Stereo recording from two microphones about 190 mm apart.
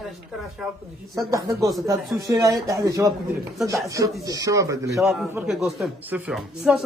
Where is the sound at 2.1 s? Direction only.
15° right (ahead or behind).